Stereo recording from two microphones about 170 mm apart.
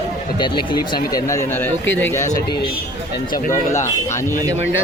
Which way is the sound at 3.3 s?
50° left (ahead or behind).